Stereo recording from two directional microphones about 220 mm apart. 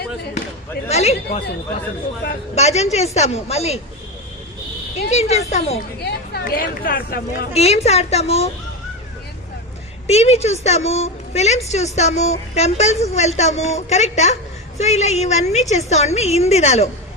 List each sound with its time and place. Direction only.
0.9 s a sound: 30° left (ahead or behind)
2.6 s a woman's voice: 30° left (ahead or behind)
5.0 s a woman's voice: 30° left (ahead or behind)
6.0 s speech: 45° left (ahead or behind)
7.5 s a woman's voice: 30° left (ahead or behind)
10.1 s a woman's voice: 30° left (ahead or behind)